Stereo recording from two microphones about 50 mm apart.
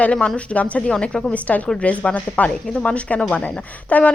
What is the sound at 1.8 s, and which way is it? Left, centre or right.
A woman's voice, left.